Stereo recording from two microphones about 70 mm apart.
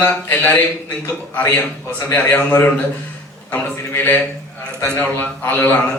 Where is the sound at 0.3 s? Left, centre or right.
Left.